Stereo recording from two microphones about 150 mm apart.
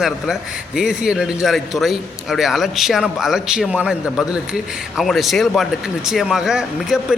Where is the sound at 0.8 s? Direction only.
5° right (ahead or behind).